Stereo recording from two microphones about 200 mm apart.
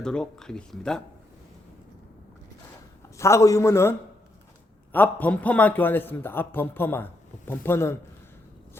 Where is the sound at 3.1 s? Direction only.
15° left (ahead or behind).